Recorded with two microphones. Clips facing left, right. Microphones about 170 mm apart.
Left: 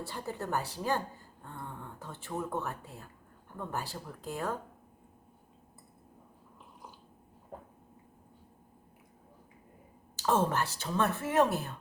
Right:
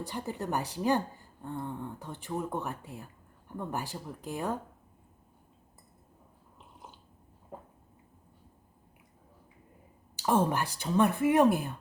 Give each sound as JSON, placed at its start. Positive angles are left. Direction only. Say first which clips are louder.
{"t": 0.0, "sound": "speech", "louder": "right 2 dB", "side_deg": -15}
{"t": 10.2, "sound": "speech", "louder": "right 2 dB", "side_deg": -15}